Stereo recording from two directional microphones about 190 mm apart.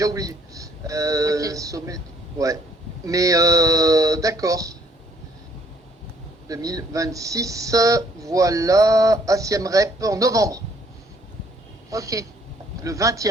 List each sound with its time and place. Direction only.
0.0 s speech: 20° right (ahead or behind)
3.1 s speech: 15° right (ahead or behind)
6.5 s speech: 20° right (ahead or behind)
11.9 s speech: 15° right (ahead or behind)